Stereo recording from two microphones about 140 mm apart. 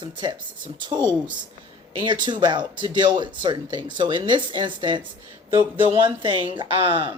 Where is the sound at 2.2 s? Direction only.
35° right (ahead or behind).